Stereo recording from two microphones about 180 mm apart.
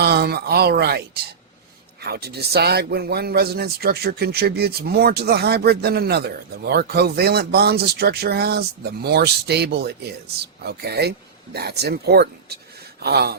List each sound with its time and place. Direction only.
0.0 s speech: 60° right (ahead or behind)